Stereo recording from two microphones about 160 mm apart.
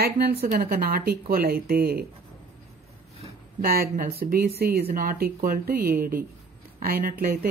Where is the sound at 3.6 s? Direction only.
70° right (ahead or behind).